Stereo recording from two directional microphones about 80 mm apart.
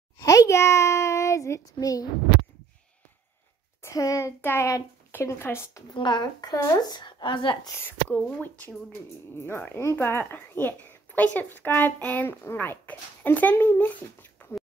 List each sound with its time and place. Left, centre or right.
0.2 s a sound: left
3.8 s speech: left
4.4 s a woman's voice: left
5.9 s a woman's voice: left
8.1 s a woman's voice: left
14.4 s a sound: left